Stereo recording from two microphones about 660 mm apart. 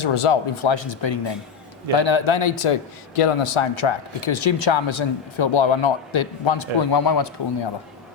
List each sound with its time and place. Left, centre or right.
0.0 s speech: left